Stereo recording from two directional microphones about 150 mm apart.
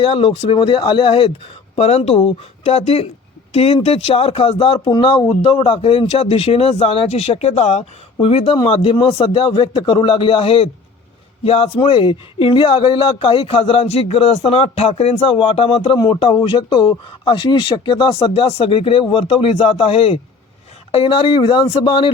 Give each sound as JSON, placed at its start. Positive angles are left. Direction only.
{"t": 0.0, "sound": "speech", "side_deg": 35}